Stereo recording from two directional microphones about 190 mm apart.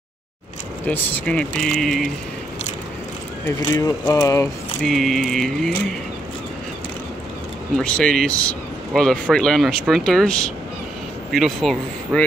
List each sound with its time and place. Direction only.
0.8 s speech: 10° left (ahead or behind)
3.5 s speech: 20° left (ahead or behind)
4.8 s speech: centre (ahead or behind)
7.7 s speech: 5° left (ahead or behind)
11.3 s speech: centre (ahead or behind)